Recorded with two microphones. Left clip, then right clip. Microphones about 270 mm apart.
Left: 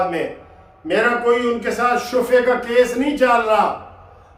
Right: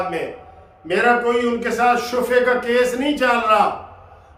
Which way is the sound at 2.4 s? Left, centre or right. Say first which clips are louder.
Left 1 dB; centre.